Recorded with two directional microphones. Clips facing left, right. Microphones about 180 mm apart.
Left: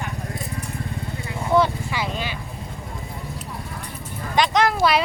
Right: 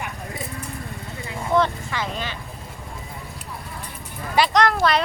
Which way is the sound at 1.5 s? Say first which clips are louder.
Left 2 dB; 10° left (ahead or behind).